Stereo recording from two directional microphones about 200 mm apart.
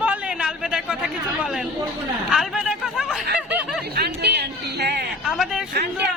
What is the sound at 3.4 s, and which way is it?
Snicker, 5° right (ahead or behind).